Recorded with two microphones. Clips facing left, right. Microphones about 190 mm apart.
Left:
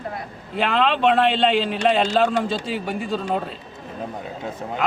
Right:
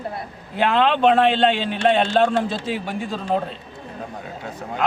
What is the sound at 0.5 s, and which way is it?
A man's voice, centre (ahead or behind).